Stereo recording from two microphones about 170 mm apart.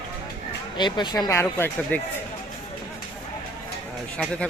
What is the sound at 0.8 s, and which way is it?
Speech, 25° left (ahead or behind).